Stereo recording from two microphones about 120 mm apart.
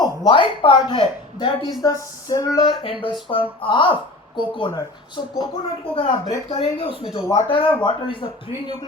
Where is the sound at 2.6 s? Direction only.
45° left (ahead or behind).